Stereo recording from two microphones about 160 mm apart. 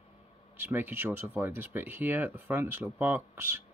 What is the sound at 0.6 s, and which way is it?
Speech, 10° right (ahead or behind).